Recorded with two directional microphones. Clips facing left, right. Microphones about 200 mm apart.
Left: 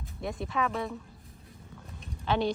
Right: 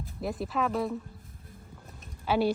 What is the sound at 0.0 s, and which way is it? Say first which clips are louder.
Speech: right 2 dB; centre (ahead or behind).